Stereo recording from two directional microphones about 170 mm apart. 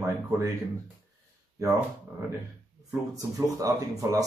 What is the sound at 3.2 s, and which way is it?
Speech, 20° right (ahead or behind).